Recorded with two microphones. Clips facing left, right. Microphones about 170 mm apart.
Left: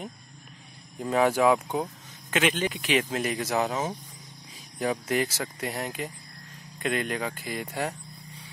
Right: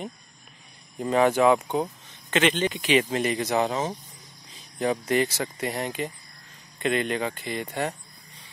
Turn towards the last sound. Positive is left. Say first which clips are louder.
# right 2 dB
turn(degrees=5)  # may be behind; listen again after turning